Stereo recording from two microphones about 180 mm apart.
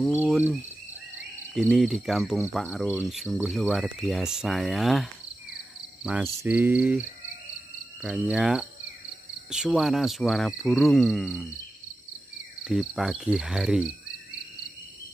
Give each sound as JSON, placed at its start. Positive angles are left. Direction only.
{"t": 0.1, "sound": "cricket", "side_deg": -10}
{"t": 1.5, "sound": "speech", "side_deg": 0}
{"t": 6.0, "sound": "cricket", "side_deg": -10}
{"t": 8.0, "sound": "speech", "side_deg": -5}
{"t": 12.6, "sound": "speech", "side_deg": -5}